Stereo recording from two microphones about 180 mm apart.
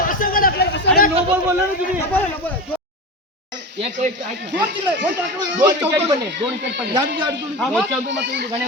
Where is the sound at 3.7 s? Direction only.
35° right (ahead or behind).